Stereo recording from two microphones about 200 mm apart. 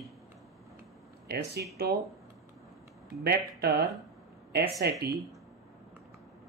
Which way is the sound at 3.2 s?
55° right (ahead or behind).